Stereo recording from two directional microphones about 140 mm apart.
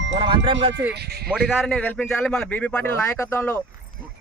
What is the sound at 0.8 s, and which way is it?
Speech, 10° right (ahead or behind).